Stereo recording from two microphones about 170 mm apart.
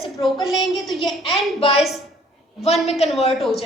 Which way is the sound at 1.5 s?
35° left (ahead or behind).